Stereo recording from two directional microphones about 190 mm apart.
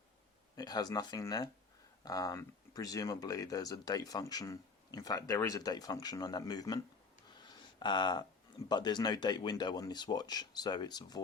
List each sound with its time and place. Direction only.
0.5 s speech: 20° left (ahead or behind)
7.4 s a sound: 25° left (ahead or behind)
8.7 s speech: 20° left (ahead or behind)